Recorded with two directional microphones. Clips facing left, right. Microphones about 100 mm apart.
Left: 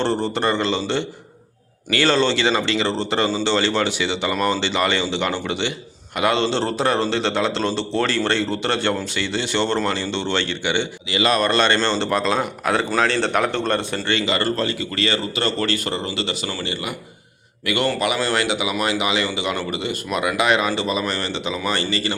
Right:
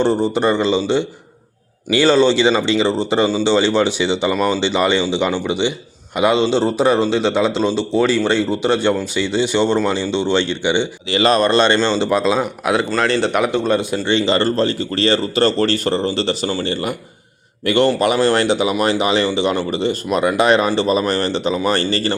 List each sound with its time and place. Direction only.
0.0 s speech: 10° right (ahead or behind)
4.4 s a man's voice: 5° right (ahead or behind)
4.6 s speech: 15° right (ahead or behind)
11.1 s speech: 30° right (ahead or behind); by 12.8 s 10° right (ahead or behind)
13.0 s a man's voice: centre (ahead or behind)
14.1 s speech: 25° right (ahead or behind)